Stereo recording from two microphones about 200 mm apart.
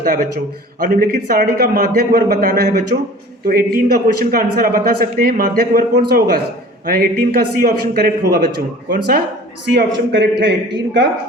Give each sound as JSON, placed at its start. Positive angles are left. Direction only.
{"t": 0.0, "sound": "a man's voice", "side_deg": -45}